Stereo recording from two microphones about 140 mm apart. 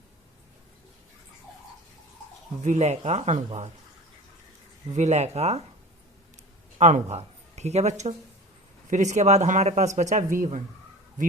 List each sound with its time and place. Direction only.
2.6 s speech: 50° right (ahead or behind)
4.9 s speech: 50° right (ahead or behind)
6.7 s speech: 55° right (ahead or behind)